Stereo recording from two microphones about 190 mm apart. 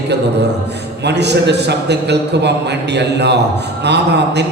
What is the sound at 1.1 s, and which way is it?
A man's voice, 60° right (ahead or behind).